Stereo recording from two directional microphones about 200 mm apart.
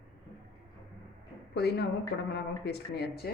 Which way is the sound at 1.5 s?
55° left (ahead or behind).